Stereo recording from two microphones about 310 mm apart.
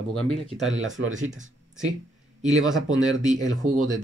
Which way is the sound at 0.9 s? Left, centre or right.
Right.